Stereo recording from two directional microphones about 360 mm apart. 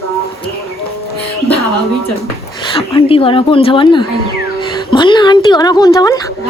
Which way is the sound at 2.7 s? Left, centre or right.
Centre.